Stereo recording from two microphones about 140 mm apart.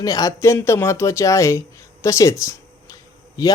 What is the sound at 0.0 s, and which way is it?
Speech, 25° left (ahead or behind).